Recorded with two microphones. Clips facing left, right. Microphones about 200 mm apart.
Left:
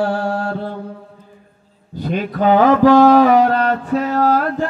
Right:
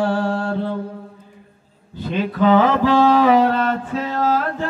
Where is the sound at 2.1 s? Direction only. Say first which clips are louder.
Even; 40° left (ahead or behind).